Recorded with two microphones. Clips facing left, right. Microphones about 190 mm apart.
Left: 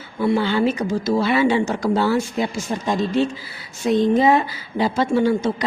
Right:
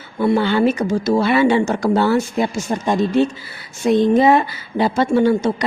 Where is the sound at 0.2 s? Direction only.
60° right (ahead or behind).